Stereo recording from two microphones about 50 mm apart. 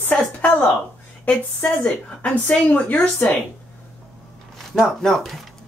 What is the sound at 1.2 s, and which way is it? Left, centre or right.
A woman's voice, left.